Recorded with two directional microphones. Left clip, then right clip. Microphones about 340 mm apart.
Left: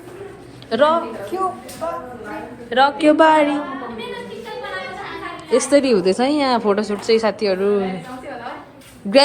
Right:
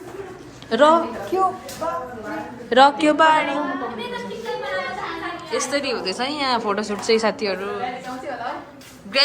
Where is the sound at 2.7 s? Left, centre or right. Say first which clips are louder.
Even; centre.